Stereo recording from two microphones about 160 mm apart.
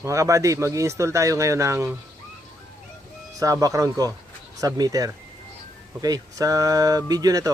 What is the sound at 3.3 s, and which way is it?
Speech, 20° right (ahead or behind).